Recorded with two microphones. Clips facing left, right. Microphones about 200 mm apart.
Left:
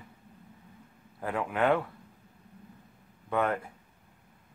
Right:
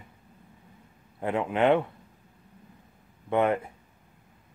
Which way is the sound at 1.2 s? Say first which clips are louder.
Right 4 dB; 20° right (ahead or behind).